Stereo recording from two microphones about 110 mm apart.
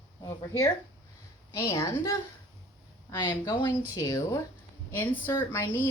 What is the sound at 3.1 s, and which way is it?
Speech, 40° left (ahead or behind).